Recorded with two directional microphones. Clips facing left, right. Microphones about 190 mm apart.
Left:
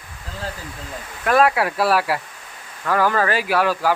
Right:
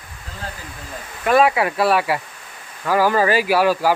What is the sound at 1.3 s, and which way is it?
Speech, centre (ahead or behind).